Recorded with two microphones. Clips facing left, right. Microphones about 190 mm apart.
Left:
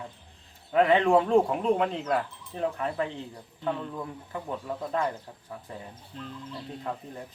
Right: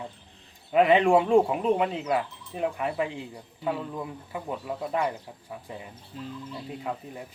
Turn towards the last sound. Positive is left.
turn(degrees=-10)  # may be behind; listen again after turning